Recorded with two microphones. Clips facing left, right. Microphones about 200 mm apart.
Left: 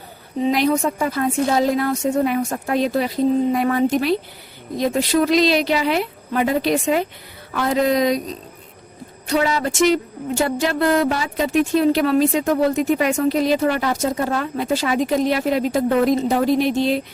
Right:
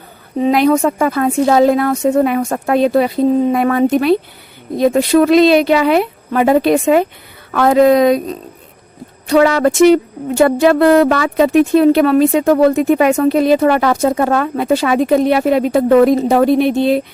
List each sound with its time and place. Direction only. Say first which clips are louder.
0.3 s speech: right 6 dB; 55° right (ahead or behind)
9.3 s speech: right 9 dB; 75° right (ahead or behind); by 17.0 s 55° right (ahead or behind)